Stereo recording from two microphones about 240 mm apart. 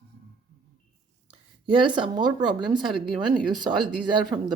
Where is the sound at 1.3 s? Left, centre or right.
Centre.